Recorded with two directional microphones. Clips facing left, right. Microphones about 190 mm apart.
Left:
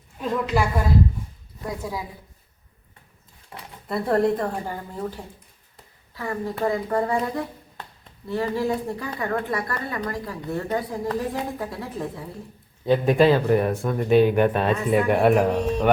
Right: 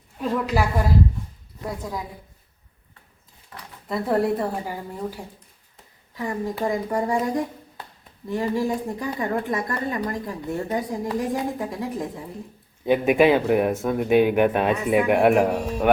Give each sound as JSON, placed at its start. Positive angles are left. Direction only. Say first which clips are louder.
{"t": 0.2, "sound": "a woman's voice", "louder": "even", "side_deg": -5}
{"t": 1.8, "sound": "a woman's voice", "louder": "left 1 dB", "side_deg": 5}
{"t": 3.5, "sound": "a sound", "louder": "left 2 dB", "side_deg": 25}
{"t": 3.8, "sound": "a woman's voice", "louder": "left 1 dB", "side_deg": 0}